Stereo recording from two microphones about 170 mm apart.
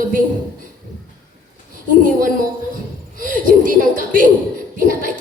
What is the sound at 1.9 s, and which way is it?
A woman's voice, 50° right (ahead or behind).